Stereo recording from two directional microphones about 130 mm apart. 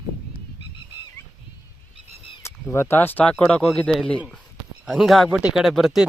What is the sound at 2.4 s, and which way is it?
Speech, 20° left (ahead or behind).